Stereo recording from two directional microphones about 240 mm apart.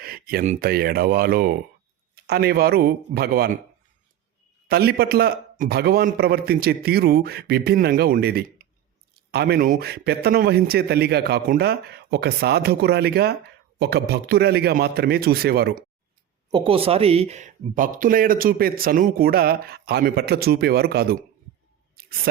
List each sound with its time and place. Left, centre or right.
0.0 s speech: right
4.7 s speech: right
16.5 s speech: right